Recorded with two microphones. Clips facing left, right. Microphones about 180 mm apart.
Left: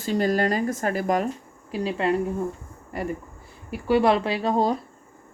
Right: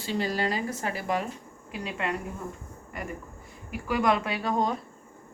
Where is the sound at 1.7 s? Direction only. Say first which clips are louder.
Left 9 dB; 30° left (ahead or behind).